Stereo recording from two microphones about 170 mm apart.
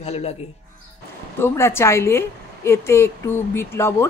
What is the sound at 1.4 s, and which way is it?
A woman's voice, 15° left (ahead or behind).